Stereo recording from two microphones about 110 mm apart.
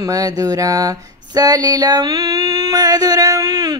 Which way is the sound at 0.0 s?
35° right (ahead or behind).